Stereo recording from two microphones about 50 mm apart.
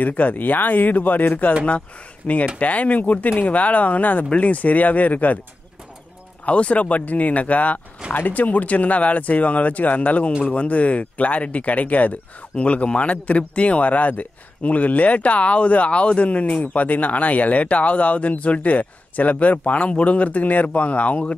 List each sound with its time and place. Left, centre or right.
0.0 s speech: left
2.2 s speech: left
6.4 s speech: left